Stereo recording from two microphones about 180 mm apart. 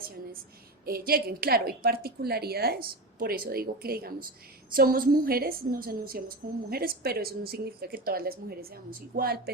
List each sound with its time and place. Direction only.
0.9 s a woman's voice: 55° right (ahead or behind)